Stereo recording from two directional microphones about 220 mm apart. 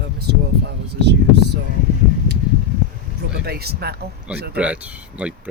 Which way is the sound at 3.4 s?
45° right (ahead or behind).